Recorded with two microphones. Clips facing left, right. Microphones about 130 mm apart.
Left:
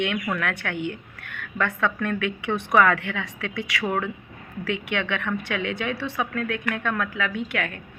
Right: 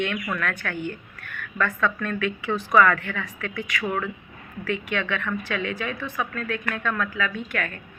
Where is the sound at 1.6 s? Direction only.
65° left (ahead or behind); by 3.8 s 80° left.